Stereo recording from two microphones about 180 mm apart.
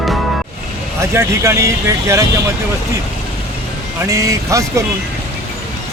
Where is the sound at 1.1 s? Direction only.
15° right (ahead or behind).